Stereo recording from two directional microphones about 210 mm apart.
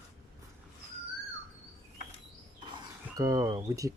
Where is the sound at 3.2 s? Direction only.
15° right (ahead or behind).